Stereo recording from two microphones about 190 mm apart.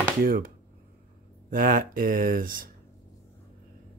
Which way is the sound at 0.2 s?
50° right (ahead or behind).